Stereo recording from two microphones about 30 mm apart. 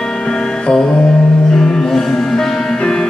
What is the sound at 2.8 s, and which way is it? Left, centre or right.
Music, left.